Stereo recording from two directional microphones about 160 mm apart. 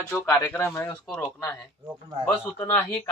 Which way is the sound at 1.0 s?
Centre (ahead or behind).